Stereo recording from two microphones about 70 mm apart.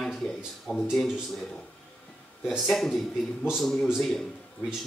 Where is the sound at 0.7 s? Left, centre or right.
Left.